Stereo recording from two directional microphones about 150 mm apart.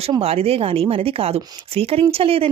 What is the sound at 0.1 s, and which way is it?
A woman's voice, 40° right (ahead or behind).